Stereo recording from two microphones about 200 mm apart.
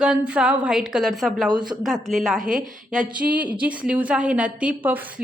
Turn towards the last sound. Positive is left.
turn(degrees=-5)  # may be behind; listen again after turning